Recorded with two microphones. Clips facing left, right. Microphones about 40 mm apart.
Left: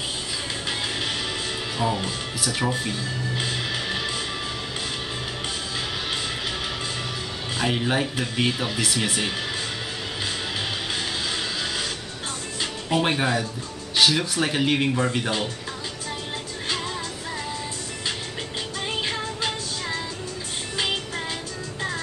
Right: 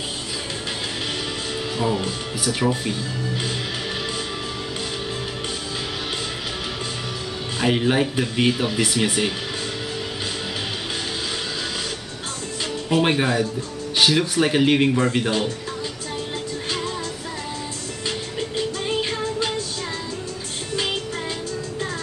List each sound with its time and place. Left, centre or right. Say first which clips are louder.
1.8 s speech: right 2 dB; centre
7.5 s speech: right 4 dB; centre
13.0 s speech: right 4 dB; centre
18.9 s music: right 4 dB; centre